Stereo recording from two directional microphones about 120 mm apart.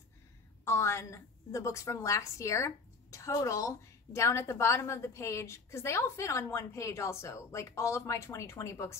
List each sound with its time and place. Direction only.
0.7 s a woman's voice: 20° left (ahead or behind)